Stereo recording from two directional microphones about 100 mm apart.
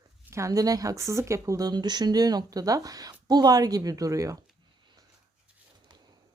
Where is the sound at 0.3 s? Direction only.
30° right (ahead or behind).